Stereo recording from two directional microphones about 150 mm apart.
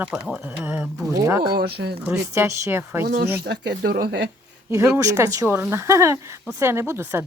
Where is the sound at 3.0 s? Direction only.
90° right.